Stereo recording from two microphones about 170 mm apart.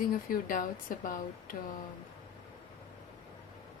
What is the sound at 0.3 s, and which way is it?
Speech, 55° left (ahead or behind).